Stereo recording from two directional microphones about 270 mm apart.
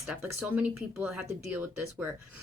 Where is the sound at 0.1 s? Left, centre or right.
Centre.